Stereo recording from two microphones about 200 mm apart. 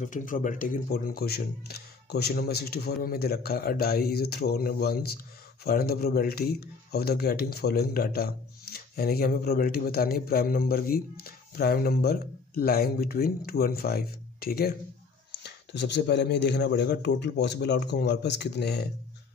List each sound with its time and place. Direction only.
0.0 s speech: 40° left (ahead or behind)